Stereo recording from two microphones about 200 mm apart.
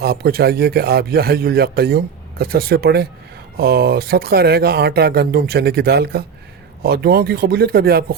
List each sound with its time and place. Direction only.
0.0 s speech: 50° right (ahead or behind)